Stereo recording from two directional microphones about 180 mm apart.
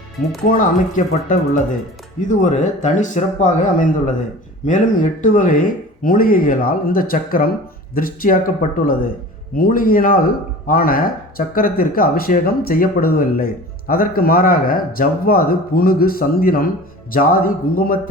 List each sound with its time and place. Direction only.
0.4 s speech: 45° left (ahead or behind)
5.2 s speech: 45° left (ahead or behind)